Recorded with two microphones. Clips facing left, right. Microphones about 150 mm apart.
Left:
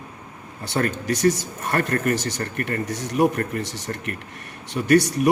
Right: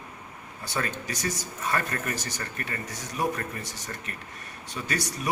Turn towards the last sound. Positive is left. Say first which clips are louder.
# left 14 dB
turn(degrees=60)  # may be behind; listen again after turning